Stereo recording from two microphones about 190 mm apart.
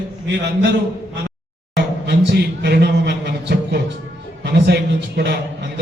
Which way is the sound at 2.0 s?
60° right (ahead or behind).